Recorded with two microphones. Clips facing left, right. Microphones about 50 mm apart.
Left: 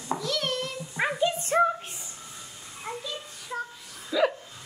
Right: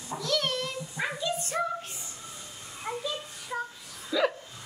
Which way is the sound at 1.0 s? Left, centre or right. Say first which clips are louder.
Left 6 dB; left.